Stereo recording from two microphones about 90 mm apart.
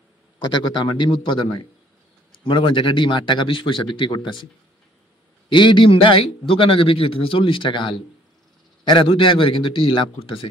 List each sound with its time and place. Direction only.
0.5 s a man's voice: 60° left (ahead or behind)
5.5 s a man's voice: 65° left (ahead or behind); by 10.4 s 90° left